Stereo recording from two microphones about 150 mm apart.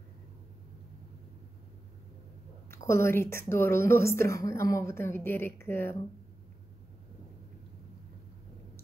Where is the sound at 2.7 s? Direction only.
15° left (ahead or behind).